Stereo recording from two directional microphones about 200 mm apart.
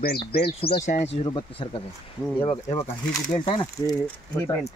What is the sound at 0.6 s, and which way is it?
Speech, 35° left (ahead or behind).